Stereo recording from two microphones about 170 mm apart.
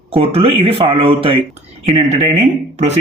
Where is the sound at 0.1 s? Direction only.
35° right (ahead or behind).